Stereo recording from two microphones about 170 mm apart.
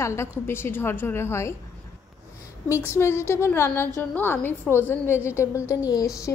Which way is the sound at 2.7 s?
15° left (ahead or behind).